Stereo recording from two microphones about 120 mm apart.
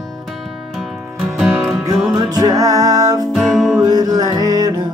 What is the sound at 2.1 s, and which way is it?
Music, 30° right (ahead or behind).